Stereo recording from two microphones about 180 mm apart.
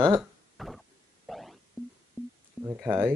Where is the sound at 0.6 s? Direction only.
Centre (ahead or behind).